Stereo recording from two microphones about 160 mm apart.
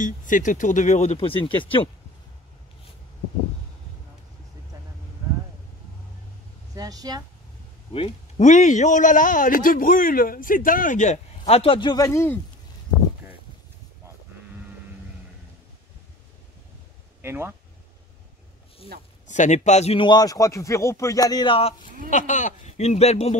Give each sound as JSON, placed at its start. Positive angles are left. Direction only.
{"t": 0.0, "sound": "a man's voice", "side_deg": 55}
{"t": 6.7, "sound": "speech", "side_deg": -25}
{"t": 7.9, "sound": "speech", "side_deg": 35}
{"t": 8.5, "sound": "a man's voice", "side_deg": 50}
{"t": 17.2, "sound": "speech", "side_deg": -15}
{"t": 19.2, "sound": "a man's voice", "side_deg": 50}
{"t": 22.1, "sound": "a man's voice", "side_deg": 50}